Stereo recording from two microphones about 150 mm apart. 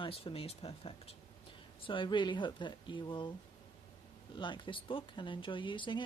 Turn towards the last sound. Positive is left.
turn(degrees=30)  # may be behind; listen again after turning